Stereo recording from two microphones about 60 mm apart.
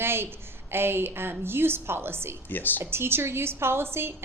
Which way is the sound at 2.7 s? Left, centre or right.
Right.